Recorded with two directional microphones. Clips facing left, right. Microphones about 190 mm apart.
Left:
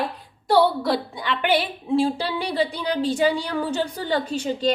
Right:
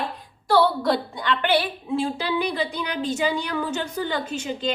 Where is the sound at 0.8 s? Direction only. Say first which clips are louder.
Right 1 dB; 5° left (ahead or behind).